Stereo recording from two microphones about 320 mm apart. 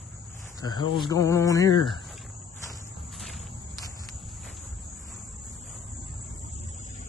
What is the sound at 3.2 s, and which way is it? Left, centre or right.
Walk, centre.